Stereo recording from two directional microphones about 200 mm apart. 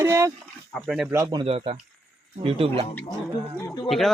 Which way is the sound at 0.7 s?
Centre (ahead or behind).